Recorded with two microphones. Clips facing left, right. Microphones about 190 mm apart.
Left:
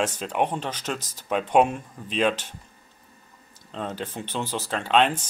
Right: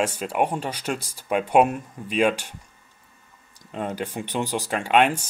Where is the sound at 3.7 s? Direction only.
10° right (ahead or behind).